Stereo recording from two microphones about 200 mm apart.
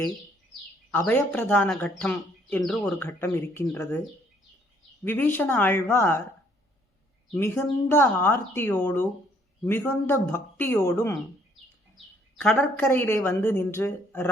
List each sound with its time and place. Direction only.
0.9 s a woman's voice: 10° left (ahead or behind)
2.6 s a woman's voice: centre (ahead or behind)
5.0 s a woman's voice: 10° left (ahead or behind)
7.3 s a woman's voice: 15° left (ahead or behind)
12.4 s a woman's voice: 10° left (ahead or behind)